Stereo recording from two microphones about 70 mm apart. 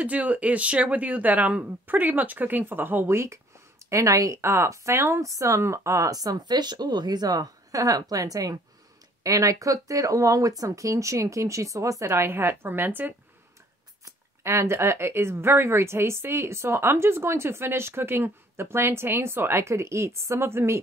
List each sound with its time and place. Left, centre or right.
0.0 s speech: right
3.9 s speech: right
6.1 s speech: right
12.2 s speech: right
14.4 s a woman's voice: right